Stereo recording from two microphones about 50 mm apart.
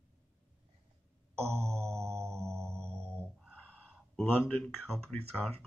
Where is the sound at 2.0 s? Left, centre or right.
Right.